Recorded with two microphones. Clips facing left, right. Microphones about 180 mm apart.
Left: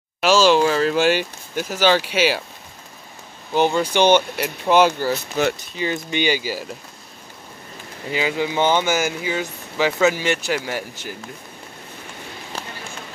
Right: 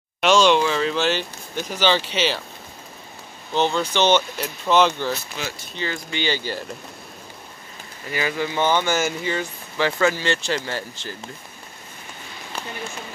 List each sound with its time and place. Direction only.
0.2 s speech: 5° left (ahead or behind)
3.5 s speech: 10° left (ahead or behind)
5.4 s speech: 45° left (ahead or behind)
5.8 s speech: 20° left (ahead or behind)
8.1 s speech: 15° left (ahead or behind)
8.9 s speech: 5° left (ahead or behind)